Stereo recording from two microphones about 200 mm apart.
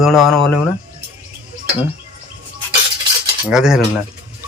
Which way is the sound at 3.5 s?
5° right (ahead or behind).